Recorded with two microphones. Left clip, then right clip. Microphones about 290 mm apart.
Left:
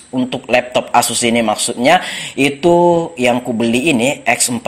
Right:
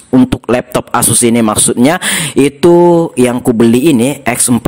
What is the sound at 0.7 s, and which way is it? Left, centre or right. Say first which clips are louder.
A man's voice: right 1 dB; right.